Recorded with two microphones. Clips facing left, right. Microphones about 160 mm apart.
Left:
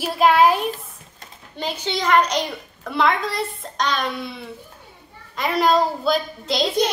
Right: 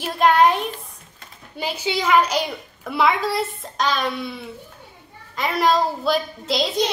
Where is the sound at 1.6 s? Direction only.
5° right (ahead or behind).